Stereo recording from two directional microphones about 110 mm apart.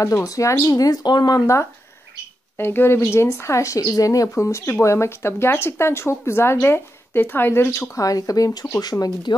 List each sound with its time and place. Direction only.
0.0 s speech: 30° left (ahead or behind)
7.9 s speech: 30° left (ahead or behind)